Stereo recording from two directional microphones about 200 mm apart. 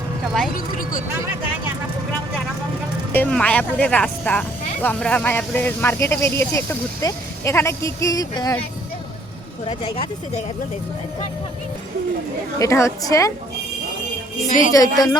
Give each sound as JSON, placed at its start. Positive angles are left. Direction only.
{"t": 0.5, "sound": "a sound", "side_deg": 40}
{"t": 3.1, "sound": "speech", "side_deg": 10}
{"t": 9.6, "sound": "speech", "side_deg": 25}
{"t": 12.5, "sound": "speech", "side_deg": 15}
{"t": 14.4, "sound": "speech", "side_deg": 40}
{"t": 14.7, "sound": "speech", "side_deg": 20}